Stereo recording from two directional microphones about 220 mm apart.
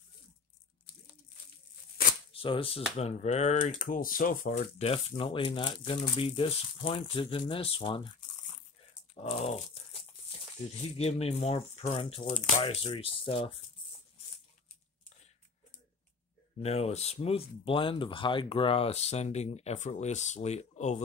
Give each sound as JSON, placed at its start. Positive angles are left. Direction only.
{"t": 2.3, "sound": "speech", "side_deg": 25}
{"t": 9.1, "sound": "crumpling", "side_deg": 25}
{"t": 10.8, "sound": "speech", "side_deg": 30}
{"t": 16.6, "sound": "speech", "side_deg": 30}